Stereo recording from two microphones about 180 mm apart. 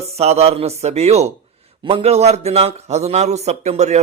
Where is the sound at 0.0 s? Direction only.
35° right (ahead or behind).